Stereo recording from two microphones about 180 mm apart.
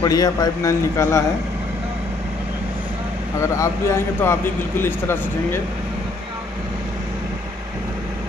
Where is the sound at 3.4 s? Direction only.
15° left (ahead or behind).